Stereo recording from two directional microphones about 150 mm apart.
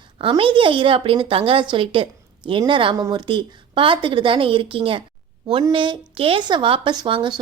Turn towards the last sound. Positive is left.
turn(degrees=-35)  # may be behind; listen again after turning